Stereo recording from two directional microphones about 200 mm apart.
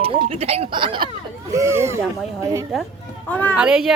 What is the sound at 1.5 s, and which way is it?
Speech, 15° right (ahead or behind).